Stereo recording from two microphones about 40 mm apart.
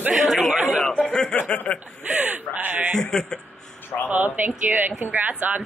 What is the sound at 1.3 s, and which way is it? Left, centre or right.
Chuckle, left.